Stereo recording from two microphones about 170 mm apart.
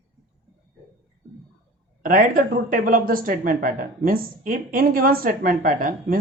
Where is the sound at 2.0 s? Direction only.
55° right (ahead or behind).